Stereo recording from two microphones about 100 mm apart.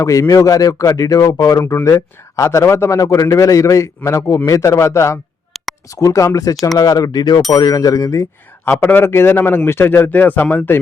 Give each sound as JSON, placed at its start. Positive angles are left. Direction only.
{"t": 0.0, "sound": "a man's voice", "side_deg": 35}
{"t": 5.5, "sound": "a sound", "side_deg": 0}
{"t": 5.9, "sound": "a man's voice", "side_deg": 35}